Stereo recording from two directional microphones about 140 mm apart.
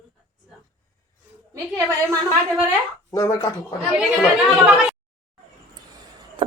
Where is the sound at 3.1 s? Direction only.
25° left (ahead or behind).